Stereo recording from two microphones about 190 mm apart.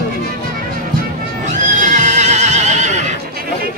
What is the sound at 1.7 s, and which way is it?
Horse, 40° right (ahead or behind).